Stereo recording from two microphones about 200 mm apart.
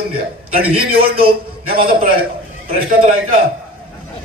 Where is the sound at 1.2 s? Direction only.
50° right (ahead or behind).